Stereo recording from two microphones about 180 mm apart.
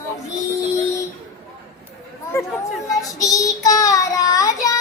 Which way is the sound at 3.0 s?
20° left (ahead or behind).